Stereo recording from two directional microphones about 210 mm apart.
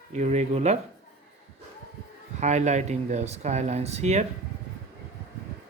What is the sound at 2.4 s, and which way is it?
Speech, 35° right (ahead or behind).